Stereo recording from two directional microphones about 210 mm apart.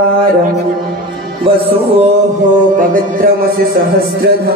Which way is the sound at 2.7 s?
40° right (ahead or behind).